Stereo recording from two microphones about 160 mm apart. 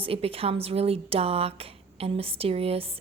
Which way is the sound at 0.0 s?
35° right (ahead or behind).